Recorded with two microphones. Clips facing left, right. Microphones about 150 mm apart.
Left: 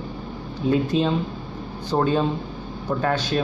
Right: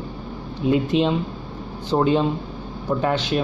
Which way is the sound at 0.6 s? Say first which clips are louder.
Right 2 dB; 15° right (ahead or behind).